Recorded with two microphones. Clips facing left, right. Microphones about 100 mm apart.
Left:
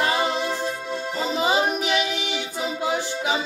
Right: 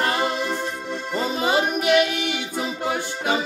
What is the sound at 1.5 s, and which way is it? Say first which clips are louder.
Music: right 3 dB; 55° right (ahead or behind).